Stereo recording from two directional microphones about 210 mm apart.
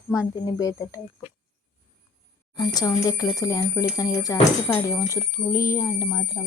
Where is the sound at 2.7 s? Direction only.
15° left (ahead or behind).